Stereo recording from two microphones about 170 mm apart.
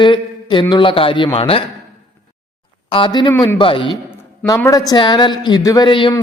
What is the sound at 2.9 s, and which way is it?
A man's voice, 25° left (ahead or behind).